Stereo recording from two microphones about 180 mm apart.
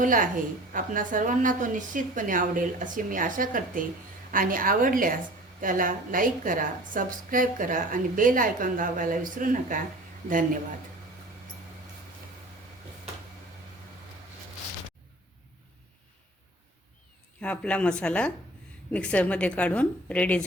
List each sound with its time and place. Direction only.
0.0 s a woman's voice: 50° right (ahead or behind)
17.4 s a woman's voice: 5° left (ahead or behind)